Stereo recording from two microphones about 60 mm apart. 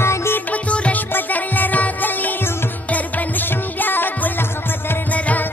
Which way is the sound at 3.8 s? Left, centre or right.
Left.